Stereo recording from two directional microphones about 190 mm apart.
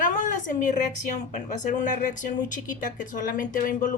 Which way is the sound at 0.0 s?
40° left (ahead or behind).